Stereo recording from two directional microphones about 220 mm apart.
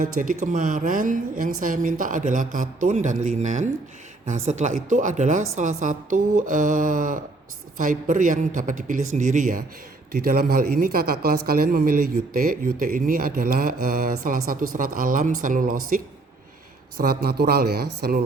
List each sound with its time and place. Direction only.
0.2 s speech: 35° right (ahead or behind)
17.2 s speech: 45° right (ahead or behind)